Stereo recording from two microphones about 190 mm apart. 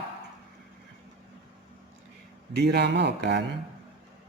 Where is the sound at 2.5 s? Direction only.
60° right (ahead or behind).